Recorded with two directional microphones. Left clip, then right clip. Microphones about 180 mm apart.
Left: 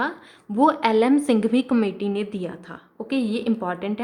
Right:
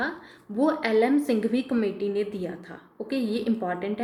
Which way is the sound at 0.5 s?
55° left (ahead or behind).